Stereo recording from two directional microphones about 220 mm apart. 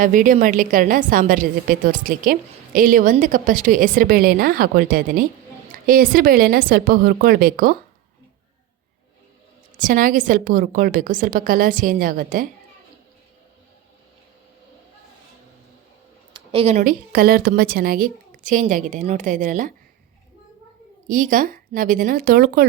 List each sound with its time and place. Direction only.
0.0 s a woman's voice: 35° right (ahead or behind)
9.7 s a woman's voice: 40° right (ahead or behind)
16.3 s a woman's voice: 25° right (ahead or behind)
21.1 s a woman's voice: 35° right (ahead or behind)